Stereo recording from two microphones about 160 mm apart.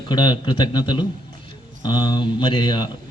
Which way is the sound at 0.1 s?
25° left (ahead or behind).